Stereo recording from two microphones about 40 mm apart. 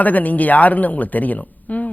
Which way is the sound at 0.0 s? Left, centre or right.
Left.